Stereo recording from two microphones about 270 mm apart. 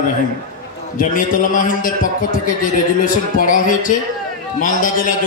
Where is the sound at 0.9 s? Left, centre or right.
Left.